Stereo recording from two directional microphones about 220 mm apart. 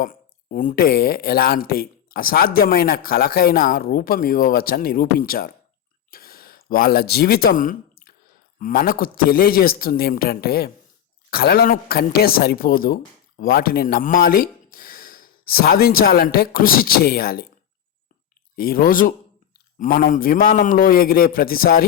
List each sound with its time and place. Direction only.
0.0 s speech: 40° left (ahead or behind)
6.1 s a sound: 40° left (ahead or behind)
8.5 s a woman's voice: 40° left (ahead or behind)
18.5 s speech: 40° left (ahead or behind)